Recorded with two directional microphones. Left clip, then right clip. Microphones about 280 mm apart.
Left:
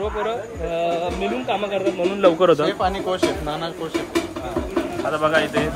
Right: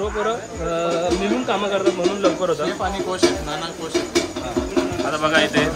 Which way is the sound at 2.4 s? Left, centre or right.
Left.